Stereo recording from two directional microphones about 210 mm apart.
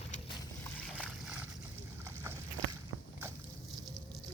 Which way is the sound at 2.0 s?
10° right (ahead or behind).